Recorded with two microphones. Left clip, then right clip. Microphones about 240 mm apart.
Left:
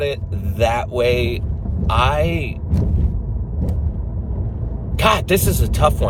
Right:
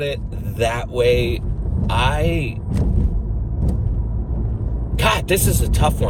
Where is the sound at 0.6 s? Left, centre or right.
Centre.